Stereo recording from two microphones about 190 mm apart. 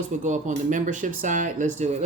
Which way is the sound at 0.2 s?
40° right (ahead or behind).